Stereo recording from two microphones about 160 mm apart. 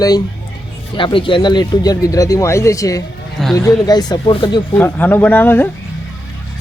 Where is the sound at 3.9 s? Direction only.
25° left (ahead or behind).